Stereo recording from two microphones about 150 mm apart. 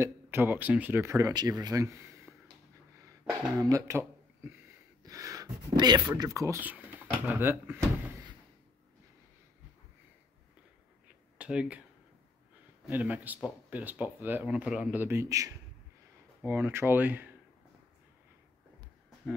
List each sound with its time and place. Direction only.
0.0 s speech: 15° right (ahead or behind)
11.3 s speech: 5° right (ahead or behind)
12.8 s speech: 10° right (ahead or behind)